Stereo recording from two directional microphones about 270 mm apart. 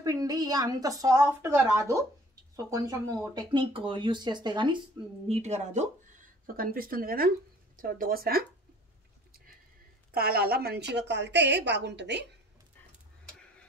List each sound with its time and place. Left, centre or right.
0.0 s a woman's voice: centre; by 8.5 s right
10.1 s a woman's voice: right